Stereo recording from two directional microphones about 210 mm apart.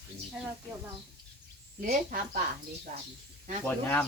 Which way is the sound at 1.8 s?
40° right (ahead or behind).